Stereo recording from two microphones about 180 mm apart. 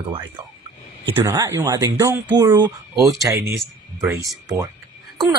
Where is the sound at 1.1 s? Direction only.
15° right (ahead or behind).